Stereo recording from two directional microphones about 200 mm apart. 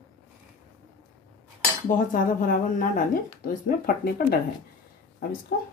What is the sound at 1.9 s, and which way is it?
Speech, 40° left (ahead or behind).